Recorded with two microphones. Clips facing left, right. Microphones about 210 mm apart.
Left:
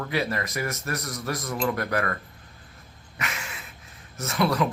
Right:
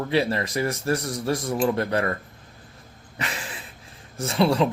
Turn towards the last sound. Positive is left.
turn(degrees=-30)  # may be behind; listen again after turning